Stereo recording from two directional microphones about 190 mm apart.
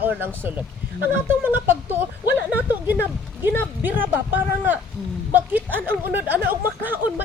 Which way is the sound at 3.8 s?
10° right (ahead or behind).